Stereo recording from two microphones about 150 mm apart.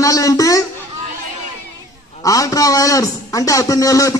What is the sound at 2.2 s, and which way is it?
A man's voice, 25° left (ahead or behind).